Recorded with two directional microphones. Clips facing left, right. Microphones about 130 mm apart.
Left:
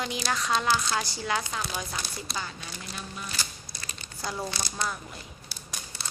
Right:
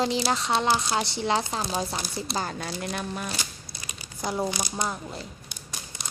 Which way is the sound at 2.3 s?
45° right (ahead or behind).